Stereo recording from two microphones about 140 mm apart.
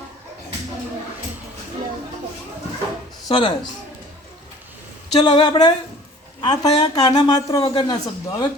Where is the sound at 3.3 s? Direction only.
35° left (ahead or behind).